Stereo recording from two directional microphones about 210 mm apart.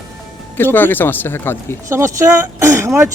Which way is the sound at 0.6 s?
10° left (ahead or behind).